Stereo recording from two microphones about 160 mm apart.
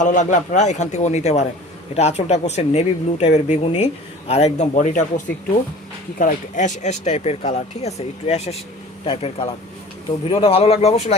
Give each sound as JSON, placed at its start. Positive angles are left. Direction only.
{"t": 0.0, "sound": "speech", "side_deg": 50}